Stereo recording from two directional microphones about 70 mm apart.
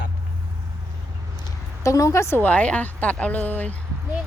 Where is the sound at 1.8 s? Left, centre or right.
Left.